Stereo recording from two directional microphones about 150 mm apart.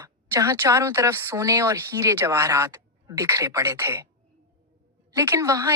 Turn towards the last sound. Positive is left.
turn(degrees=-20)  # may be behind; listen again after turning